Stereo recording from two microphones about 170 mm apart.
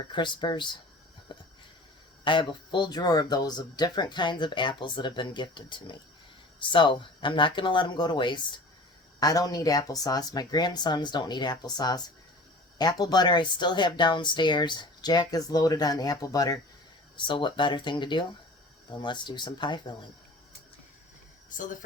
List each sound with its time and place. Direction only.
0.1 s speech: 30° left (ahead or behind)
1.3 s a sound: 30° left (ahead or behind)
2.2 s speech: 30° left (ahead or behind)
21.5 s speech: 50° left (ahead or behind)